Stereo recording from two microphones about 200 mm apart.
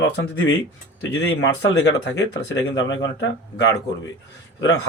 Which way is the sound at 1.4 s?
60° left (ahead or behind).